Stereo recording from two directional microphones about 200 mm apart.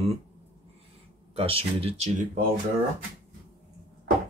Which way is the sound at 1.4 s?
30° right (ahead or behind).